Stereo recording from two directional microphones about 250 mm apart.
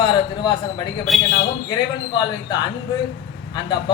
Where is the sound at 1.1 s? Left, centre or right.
Centre.